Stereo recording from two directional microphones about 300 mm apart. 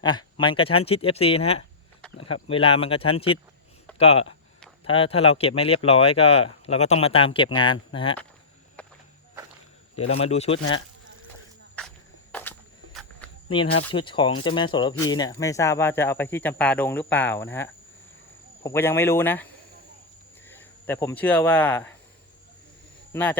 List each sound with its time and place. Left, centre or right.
0.0 s speech: centre
9.9 s speech: centre
12.3 s a sound: centre
13.9 s speech: centre
20.5 s speech: centre
23.1 s speech: centre